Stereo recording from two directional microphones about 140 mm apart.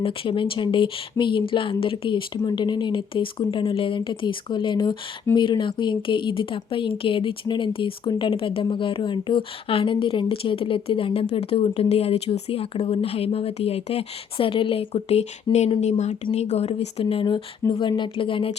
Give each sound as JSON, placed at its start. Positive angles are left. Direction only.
{"t": 0.0, "sound": "a woman's voice", "side_deg": 40}